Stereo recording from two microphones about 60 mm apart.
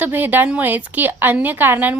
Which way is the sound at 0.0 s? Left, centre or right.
Right.